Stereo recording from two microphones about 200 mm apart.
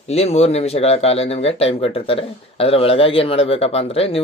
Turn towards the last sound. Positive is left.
turn(degrees=30)  # may be behind; listen again after turning